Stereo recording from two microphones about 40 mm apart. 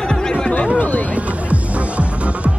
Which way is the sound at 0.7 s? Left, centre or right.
Left.